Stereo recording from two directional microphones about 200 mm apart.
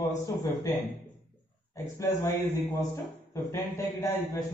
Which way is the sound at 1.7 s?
15° left (ahead or behind).